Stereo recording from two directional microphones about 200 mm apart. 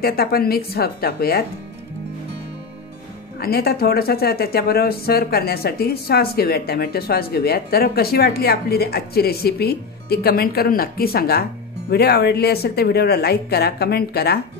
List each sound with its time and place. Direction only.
0.0 s speech: 50° left (ahead or behind)
3.3 s speech: 50° left (ahead or behind)